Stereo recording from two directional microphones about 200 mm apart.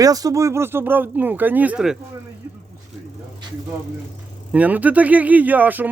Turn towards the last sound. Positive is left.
turn(degrees=-10)  # may be behind; listen again after turning